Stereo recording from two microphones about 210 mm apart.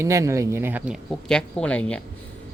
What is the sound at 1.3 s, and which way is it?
Speech, 5° left (ahead or behind).